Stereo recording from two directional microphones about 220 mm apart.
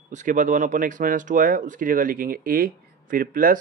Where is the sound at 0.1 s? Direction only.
35° right (ahead or behind).